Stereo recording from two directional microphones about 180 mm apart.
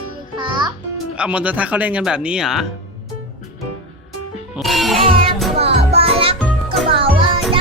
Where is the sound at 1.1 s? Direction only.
5° right (ahead or behind).